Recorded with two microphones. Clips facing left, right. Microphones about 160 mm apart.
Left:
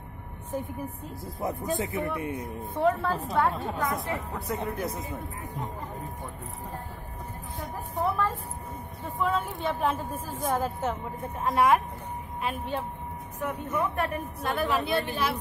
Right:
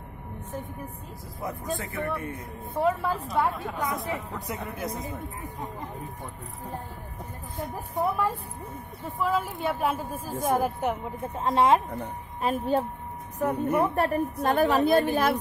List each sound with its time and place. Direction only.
1.4 s speech: 20° left (ahead or behind)
2.8 s a woman's voice: 5° right (ahead or behind)
7.9 s a woman's voice: 10° right (ahead or behind)
11.4 s speech: 25° right (ahead or behind)
12.4 s a woman's voice: 40° right (ahead or behind)